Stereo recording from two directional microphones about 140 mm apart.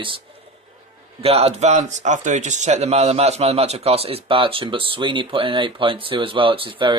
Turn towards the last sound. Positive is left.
turn(degrees=-35)  # may be behind; listen again after turning